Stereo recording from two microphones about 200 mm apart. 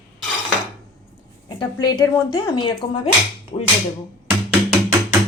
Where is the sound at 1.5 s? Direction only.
20° left (ahead or behind).